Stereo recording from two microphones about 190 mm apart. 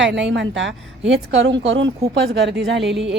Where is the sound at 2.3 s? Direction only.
65° right (ahead or behind).